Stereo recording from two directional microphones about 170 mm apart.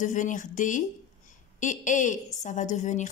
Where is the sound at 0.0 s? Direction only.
50° left (ahead or behind).